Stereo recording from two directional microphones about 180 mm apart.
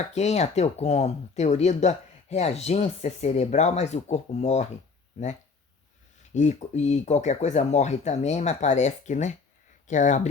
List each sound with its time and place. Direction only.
0.1 s speech: 40° left (ahead or behind)
6.3 s speech: 40° left (ahead or behind)